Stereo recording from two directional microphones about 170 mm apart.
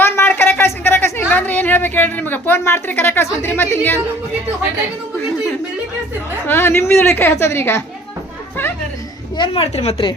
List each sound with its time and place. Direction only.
0.0 s a sound: 15° left (ahead or behind)
1.3 s a woman's voice: 10° left (ahead or behind)
6.5 s a woman's voice: 15° left (ahead or behind)
9.4 s a woman's voice: 35° left (ahead or behind)